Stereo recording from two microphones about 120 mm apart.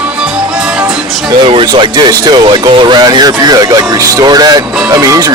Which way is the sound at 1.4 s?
45° right (ahead or behind).